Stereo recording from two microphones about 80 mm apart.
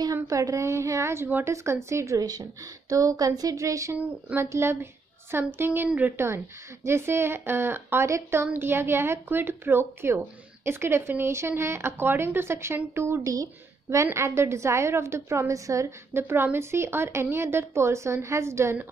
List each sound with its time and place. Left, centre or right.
0.0 s a woman's voice: right